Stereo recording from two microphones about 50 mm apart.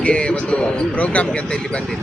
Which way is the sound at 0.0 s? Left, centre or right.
Left.